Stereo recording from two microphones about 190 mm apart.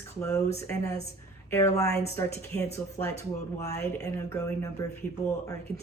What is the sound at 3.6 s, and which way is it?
Speech, 15° left (ahead or behind).